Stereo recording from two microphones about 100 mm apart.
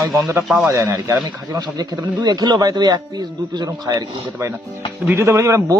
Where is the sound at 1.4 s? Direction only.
40° right (ahead or behind).